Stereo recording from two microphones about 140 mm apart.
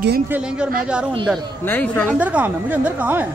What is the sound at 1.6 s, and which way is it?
Speech, 15° left (ahead or behind).